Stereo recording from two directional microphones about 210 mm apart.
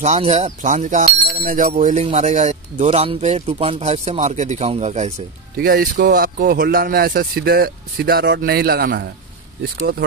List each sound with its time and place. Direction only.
0.0 s speech: 35° right (ahead or behind)
5.6 s speech: 45° right (ahead or behind)